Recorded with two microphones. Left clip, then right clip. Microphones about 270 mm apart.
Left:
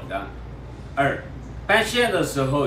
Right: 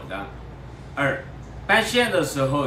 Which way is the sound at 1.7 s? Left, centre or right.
Centre.